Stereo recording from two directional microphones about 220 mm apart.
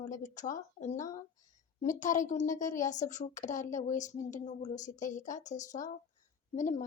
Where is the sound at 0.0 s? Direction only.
35° left (ahead or behind).